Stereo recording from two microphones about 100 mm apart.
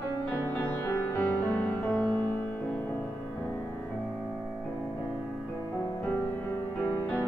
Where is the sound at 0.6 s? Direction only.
20° left (ahead or behind).